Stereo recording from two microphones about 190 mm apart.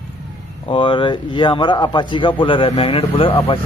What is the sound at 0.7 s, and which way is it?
A man's voice, 25° left (ahead or behind).